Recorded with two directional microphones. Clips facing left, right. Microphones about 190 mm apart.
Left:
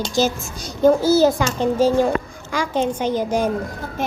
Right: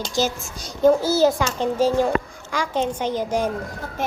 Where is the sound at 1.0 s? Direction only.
Centre (ahead or behind).